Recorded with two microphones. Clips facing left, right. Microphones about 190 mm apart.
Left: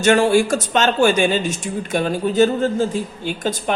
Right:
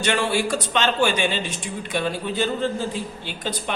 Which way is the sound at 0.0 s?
45° left (ahead or behind).